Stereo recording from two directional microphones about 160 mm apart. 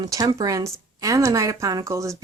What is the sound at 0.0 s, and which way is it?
Speech, 20° right (ahead or behind).